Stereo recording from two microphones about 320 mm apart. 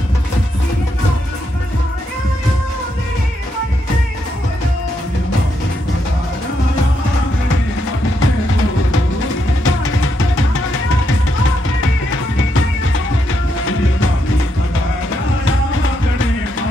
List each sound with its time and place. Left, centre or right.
9.7 s music: left